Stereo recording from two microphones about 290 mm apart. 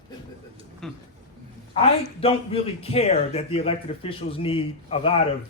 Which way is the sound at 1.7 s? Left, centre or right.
Centre.